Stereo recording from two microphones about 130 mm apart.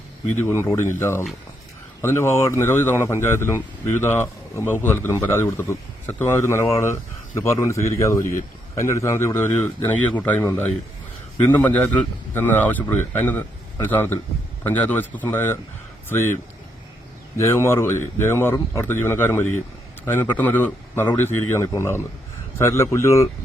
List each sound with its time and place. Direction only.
0.4 s speech: 20° left (ahead or behind)
8.2 s speech: 90° left
8.7 s speech: 20° left (ahead or behind)
17.3 s speech: 20° left (ahead or behind)